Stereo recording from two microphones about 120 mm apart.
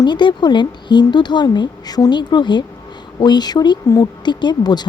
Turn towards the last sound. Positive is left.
turn(degrees=35)  # may be behind; listen again after turning